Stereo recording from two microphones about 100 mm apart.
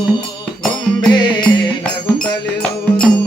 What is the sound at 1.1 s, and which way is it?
Music, 50° left (ahead or behind).